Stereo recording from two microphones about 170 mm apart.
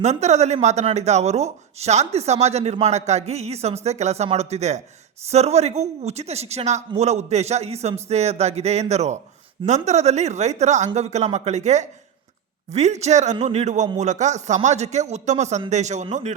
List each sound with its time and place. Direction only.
0.0 s speech: 40° right (ahead or behind)